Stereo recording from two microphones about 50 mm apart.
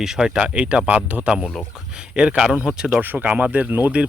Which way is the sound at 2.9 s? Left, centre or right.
Right.